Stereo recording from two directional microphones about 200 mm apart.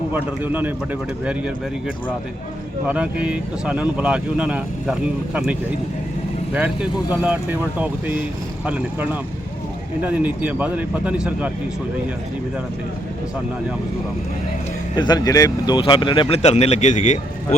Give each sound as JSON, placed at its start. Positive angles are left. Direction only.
{"t": 0.1, "sound": "speech", "side_deg": -10}
{"t": 2.8, "sound": "speech", "side_deg": -5}
{"t": 7.1, "sound": "speech", "side_deg": -10}
{"t": 14.9, "sound": "speech", "side_deg": 20}